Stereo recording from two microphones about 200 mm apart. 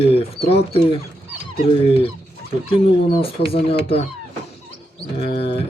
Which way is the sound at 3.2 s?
30° left (ahead or behind).